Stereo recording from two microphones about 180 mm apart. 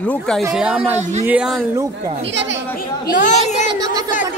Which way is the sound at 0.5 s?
5° right (ahead or behind).